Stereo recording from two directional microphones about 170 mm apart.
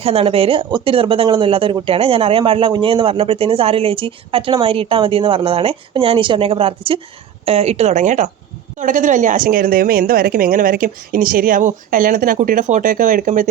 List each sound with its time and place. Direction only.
0.0 s a woman's voice: 35° right (ahead or behind)